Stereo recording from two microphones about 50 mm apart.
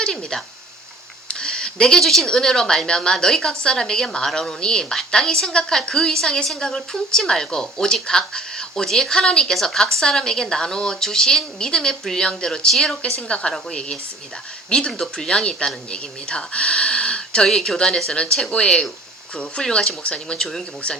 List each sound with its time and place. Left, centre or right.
0.0 s speech: centre
1.3 s a sound: centre
2.3 s a woman's voice: centre
13.1 s speech: left
14.7 s a woman's voice: centre
17.4 s a woman's voice: centre